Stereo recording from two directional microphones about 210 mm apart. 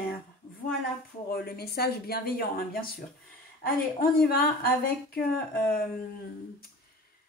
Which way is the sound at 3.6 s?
45° left (ahead or behind).